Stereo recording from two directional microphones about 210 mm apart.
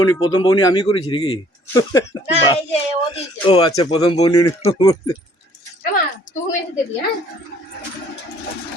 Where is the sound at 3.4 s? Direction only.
25° left (ahead or behind).